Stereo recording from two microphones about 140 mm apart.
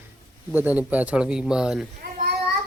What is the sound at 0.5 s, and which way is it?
Speech, 10° right (ahead or behind).